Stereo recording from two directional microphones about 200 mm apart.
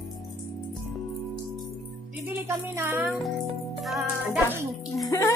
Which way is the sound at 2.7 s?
10° right (ahead or behind).